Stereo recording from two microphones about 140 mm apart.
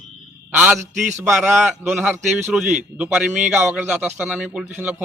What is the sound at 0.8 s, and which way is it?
Speech, 60° right (ahead or behind).